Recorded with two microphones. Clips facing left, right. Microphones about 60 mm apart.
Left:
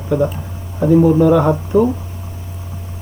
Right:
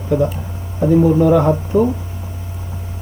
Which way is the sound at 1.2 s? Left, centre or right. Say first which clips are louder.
Left 1 dB; centre.